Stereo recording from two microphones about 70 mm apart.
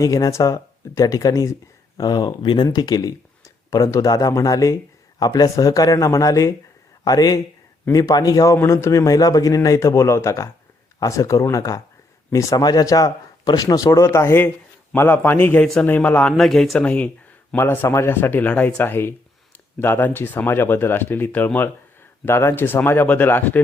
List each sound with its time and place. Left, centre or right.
0.0 s speech: left
2.0 s speech: left
2.7 s speech: left
5.2 s a man's voice: left
8.5 s a man's voice: left
14.1 s speech: left
16.4 s speech: centre
16.7 s speech: centre
17.5 s speech: left
22.3 s speech: left